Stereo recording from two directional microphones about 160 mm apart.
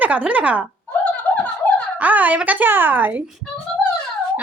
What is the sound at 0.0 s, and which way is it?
Speech, 10° right (ahead or behind).